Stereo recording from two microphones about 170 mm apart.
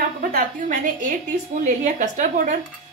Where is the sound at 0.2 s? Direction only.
50° right (ahead or behind).